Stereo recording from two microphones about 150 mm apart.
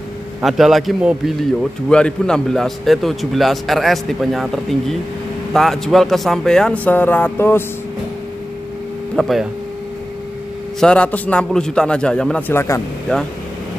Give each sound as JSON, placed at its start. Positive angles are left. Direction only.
{"t": 0.4, "sound": "a man's voice", "side_deg": 0}
{"t": 9.1, "sound": "speech", "side_deg": 0}
{"t": 10.8, "sound": "a man's voice", "side_deg": 5}